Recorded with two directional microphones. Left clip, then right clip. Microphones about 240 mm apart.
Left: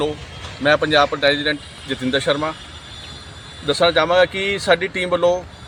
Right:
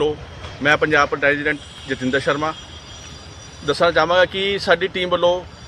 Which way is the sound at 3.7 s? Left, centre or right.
Centre.